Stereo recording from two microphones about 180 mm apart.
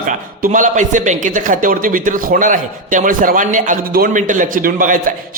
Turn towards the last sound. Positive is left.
turn(degrees=-50)  # may be behind; listen again after turning